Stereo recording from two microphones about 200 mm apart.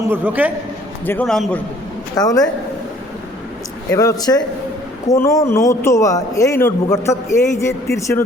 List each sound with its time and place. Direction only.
0.1 s a man's voice: 10° right (ahead or behind)
1.0 s a man's voice: 10° left (ahead or behind)
2.1 s speech: 20° left (ahead or behind)
3.9 s a man's voice: 20° left (ahead or behind)